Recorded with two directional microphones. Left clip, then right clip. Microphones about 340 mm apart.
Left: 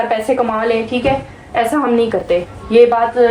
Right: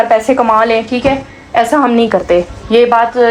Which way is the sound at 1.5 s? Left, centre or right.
Centre.